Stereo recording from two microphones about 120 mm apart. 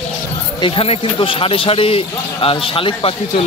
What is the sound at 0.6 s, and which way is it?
Speech, 45° left (ahead or behind).